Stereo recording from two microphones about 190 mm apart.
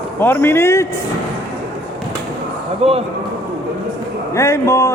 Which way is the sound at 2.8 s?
30° right (ahead or behind).